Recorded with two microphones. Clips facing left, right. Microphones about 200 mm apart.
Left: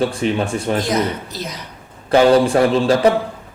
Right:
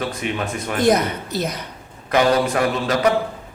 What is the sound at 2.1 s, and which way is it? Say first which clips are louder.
Speech: left 5 dB; 30° left (ahead or behind).